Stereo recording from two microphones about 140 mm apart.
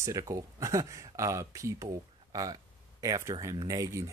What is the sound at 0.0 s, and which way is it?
Speech, 25° right (ahead or behind).